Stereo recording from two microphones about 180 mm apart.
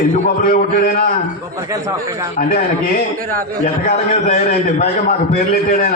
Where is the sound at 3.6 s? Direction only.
40° left (ahead or behind).